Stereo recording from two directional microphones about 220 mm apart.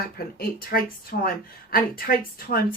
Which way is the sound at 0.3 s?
40° left (ahead or behind).